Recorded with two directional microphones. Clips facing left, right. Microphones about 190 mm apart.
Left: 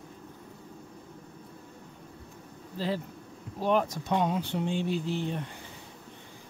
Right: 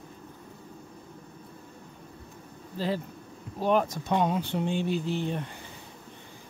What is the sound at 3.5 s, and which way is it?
Speech, 50° right (ahead or behind).